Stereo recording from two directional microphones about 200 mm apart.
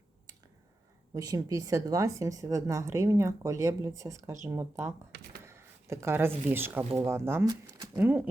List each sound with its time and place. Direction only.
1.1 s speech: 20° right (ahead or behind)
5.4 s a sound: 15° right (ahead or behind)
6.5 s speech: 10° right (ahead or behind)